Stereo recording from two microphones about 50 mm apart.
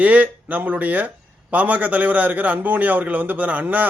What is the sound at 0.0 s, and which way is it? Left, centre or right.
A man's voice, right.